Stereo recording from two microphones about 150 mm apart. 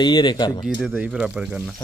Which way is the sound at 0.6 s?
5° right (ahead or behind).